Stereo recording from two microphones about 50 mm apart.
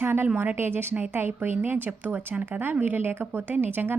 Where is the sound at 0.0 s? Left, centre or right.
Right.